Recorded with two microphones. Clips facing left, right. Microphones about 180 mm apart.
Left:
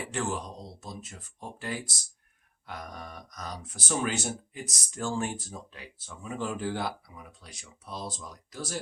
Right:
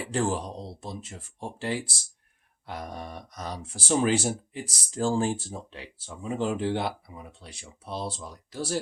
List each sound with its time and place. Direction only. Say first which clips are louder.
0.1 s speech: right 7 dB; 30° right (ahead or behind)